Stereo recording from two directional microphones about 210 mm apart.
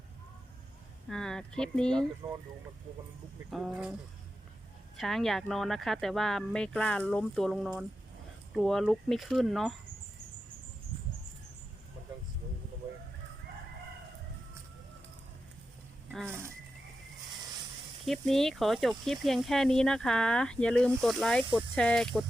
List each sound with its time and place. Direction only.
1.1 s speech: 5° left (ahead or behind)
3.5 s speech: 5° right (ahead or behind)
4.9 s speech: centre (ahead or behind)
18.0 s speech: centre (ahead or behind)